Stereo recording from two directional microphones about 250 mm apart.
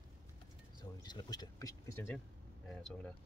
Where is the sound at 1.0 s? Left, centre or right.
Centre.